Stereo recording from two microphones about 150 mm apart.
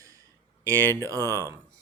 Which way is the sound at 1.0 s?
20° right (ahead or behind).